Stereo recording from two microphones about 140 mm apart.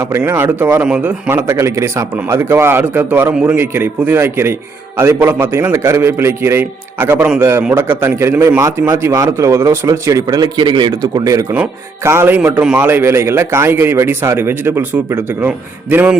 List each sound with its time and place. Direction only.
0.2 s a man's voice: 15° right (ahead or behind)
11.5 s speech: 15° right (ahead or behind)